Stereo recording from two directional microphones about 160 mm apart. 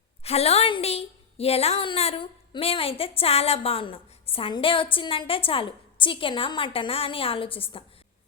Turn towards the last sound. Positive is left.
turn(degrees=35)  # may be behind; listen again after turning